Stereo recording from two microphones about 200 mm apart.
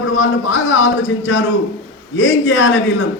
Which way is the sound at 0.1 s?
75° left (ahead or behind).